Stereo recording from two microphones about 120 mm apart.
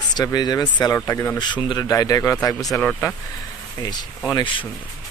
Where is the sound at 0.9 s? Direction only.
25° left (ahead or behind).